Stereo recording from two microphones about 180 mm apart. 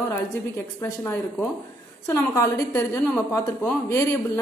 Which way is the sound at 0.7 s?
15° left (ahead or behind).